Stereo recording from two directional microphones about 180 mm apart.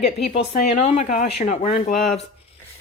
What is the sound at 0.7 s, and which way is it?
Speech, 35° left (ahead or behind).